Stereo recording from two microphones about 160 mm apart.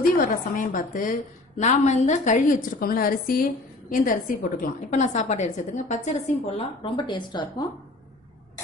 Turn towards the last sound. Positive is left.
turn(degrees=25)  # may be behind; listen again after turning